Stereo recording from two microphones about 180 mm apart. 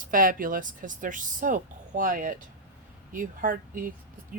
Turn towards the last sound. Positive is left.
turn(degrees=-50)  # may be behind; listen again after turning